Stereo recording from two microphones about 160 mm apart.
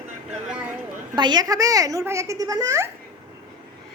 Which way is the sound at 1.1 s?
25° right (ahead or behind).